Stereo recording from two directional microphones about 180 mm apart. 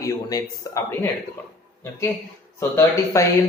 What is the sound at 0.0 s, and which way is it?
Speech, 20° left (ahead or behind).